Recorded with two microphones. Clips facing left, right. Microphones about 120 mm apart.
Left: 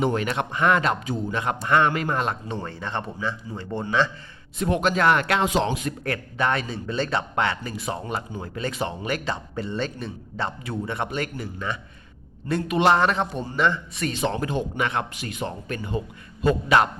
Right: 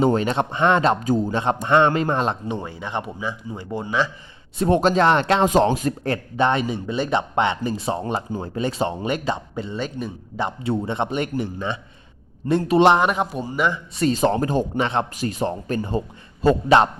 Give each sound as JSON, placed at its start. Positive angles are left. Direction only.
{"t": 0.0, "sound": "a man's voice", "side_deg": -30}
{"t": 2.5, "sound": "a man's voice", "side_deg": -10}
{"t": 4.6, "sound": "speech", "side_deg": -35}
{"t": 5.5, "sound": "speech", "side_deg": -40}
{"t": 6.0, "sound": "a man's voice", "side_deg": -25}
{"t": 9.6, "sound": "a man's voice", "side_deg": -10}
{"t": 10.6, "sound": "a man's voice", "side_deg": -25}
{"t": 12.9, "sound": "a man's voice", "side_deg": -15}
{"t": 14.0, "sound": "speech", "side_deg": -40}